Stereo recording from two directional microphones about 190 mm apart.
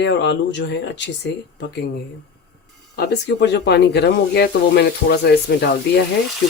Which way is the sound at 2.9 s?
60° left (ahead or behind).